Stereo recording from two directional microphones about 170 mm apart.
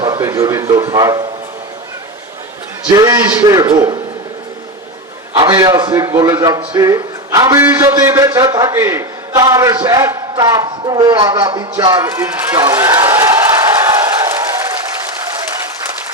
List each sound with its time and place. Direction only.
0.0 s speech: 20° right (ahead or behind)
2.8 s a man's voice: 20° right (ahead or behind)
5.3 s a man's voice: 20° right (ahead or behind)